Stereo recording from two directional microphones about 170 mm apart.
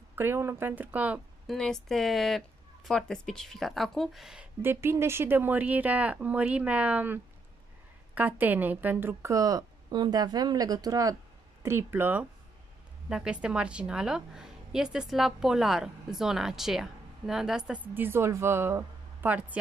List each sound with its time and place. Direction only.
0.1 s speech: 15° right (ahead or behind)
1.6 s a woman's voice: centre (ahead or behind)
4.6 s a woman's voice: 15° right (ahead or behind)